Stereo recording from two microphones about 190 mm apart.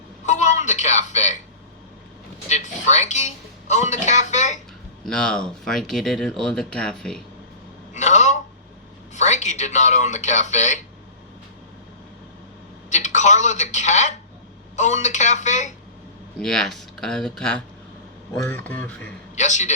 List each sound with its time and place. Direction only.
0.3 s a sound: 40° left (ahead or behind)
2.5 s speech: 35° left (ahead or behind)
5.0 s speech: 5° left (ahead or behind)
7.9 s a sound: 40° left (ahead or behind)
9.1 s a man's voice: 40° left (ahead or behind)
12.9 s a woman's voice: 40° left (ahead or behind)
16.4 s speech: 5° left (ahead or behind)
19.4 s speech: 40° left (ahead or behind)